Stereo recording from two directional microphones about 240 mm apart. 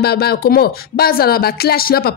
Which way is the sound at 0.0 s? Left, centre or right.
Left.